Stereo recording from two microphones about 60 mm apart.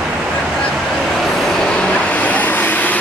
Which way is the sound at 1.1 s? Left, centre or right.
Centre.